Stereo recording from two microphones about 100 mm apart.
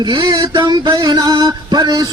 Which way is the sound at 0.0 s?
50° right (ahead or behind).